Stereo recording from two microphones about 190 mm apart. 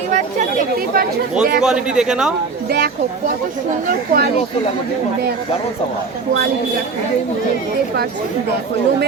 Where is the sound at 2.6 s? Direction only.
55° right (ahead or behind).